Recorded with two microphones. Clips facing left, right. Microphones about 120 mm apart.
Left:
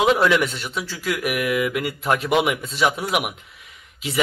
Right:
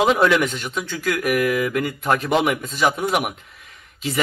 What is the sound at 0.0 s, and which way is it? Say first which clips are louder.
A man's voice: right 1 dB; centre (ahead or behind).